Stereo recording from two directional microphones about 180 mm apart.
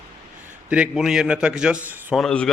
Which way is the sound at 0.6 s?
5° right (ahead or behind).